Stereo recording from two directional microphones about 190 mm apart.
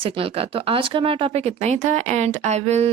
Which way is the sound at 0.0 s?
30° right (ahead or behind).